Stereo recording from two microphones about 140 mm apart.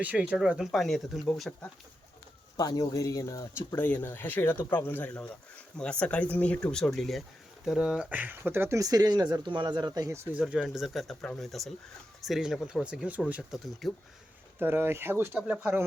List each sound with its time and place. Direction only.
0.0 s speech: 10° right (ahead or behind)
2.6 s speech: 25° left (ahead or behind); by 10.2 s 25° right (ahead or behind)
10.3 s speech: 5° right (ahead or behind)
14.6 s speech: 15° right (ahead or behind)